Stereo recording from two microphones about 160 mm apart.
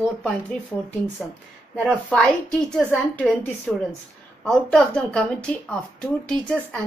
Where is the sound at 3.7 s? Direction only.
5° left (ahead or behind).